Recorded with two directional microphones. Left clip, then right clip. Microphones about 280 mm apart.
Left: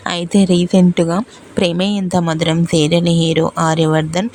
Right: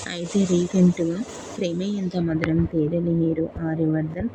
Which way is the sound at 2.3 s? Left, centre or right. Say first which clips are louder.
Left 6 dB; left.